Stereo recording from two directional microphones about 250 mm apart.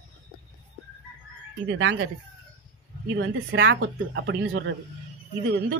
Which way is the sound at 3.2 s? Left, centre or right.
Right.